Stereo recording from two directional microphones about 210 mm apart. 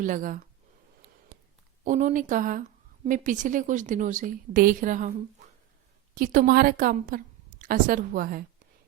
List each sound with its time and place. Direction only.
0.0 s a woman's voice: 40° right (ahead or behind)
1.8 s a woman's voice: 35° right (ahead or behind)
6.1 s a woman's voice: 40° right (ahead or behind)